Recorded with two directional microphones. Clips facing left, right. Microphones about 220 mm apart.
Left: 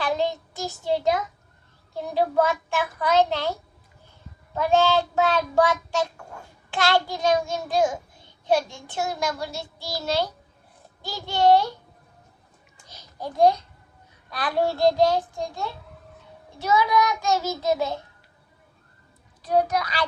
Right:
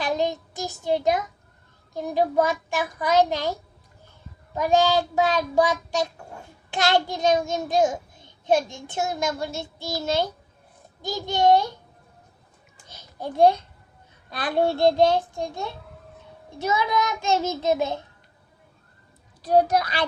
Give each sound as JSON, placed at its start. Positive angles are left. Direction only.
{"t": 0.0, "sound": "child singing", "side_deg": -15}
{"t": 4.5, "sound": "child singing", "side_deg": -15}
{"t": 13.1, "sound": "a child's voice", "side_deg": -25}
{"t": 14.3, "sound": "child singing", "side_deg": -25}
{"t": 19.4, "sound": "a child's voice", "side_deg": -40}